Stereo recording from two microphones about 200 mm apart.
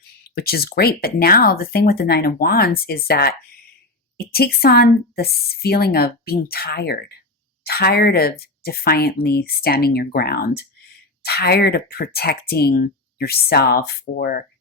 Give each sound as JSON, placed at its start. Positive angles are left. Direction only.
{"t": 0.3, "sound": "speech", "side_deg": 50}